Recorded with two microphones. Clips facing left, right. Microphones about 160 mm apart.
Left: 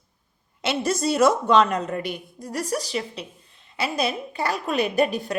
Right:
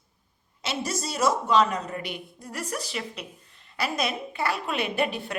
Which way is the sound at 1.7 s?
50° left (ahead or behind).